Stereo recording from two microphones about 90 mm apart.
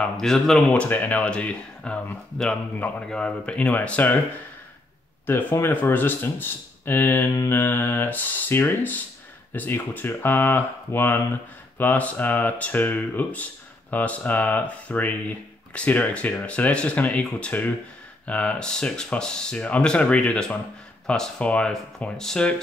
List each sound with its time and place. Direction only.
0.0 s speech: 5° left (ahead or behind)
5.2 s speech: 25° left (ahead or behind)